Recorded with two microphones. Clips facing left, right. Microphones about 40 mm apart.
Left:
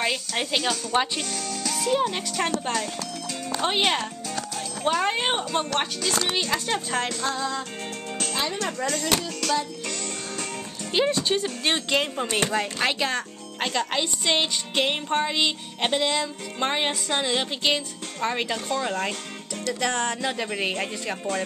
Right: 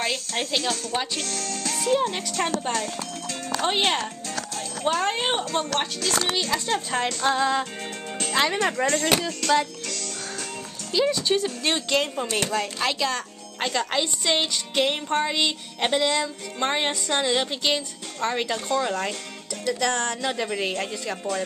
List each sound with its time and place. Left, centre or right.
0.0 s speech: centre
1.9 s a child's voice: centre
6.9 s speech: centre
7.3 s music: right
8.5 s speech: right
9.4 s speech: centre
10.9 s speech: left; by 12.4 s centre
12.4 s speech: left
13.6 s speech: centre
19.7 s speech: centre